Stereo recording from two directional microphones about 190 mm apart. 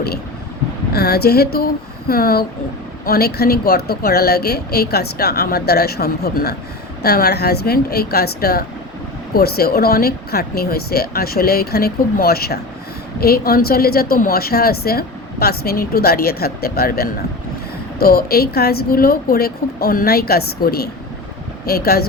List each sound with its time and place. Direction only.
0.9 s a woman's voice: 55° left (ahead or behind)